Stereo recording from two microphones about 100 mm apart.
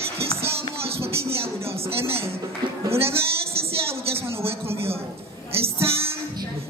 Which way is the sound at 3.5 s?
75° right (ahead or behind).